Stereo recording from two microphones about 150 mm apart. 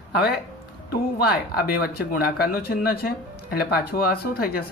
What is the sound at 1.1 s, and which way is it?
Speech, 90° left.